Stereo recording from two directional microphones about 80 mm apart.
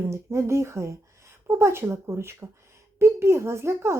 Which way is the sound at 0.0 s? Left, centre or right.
Right.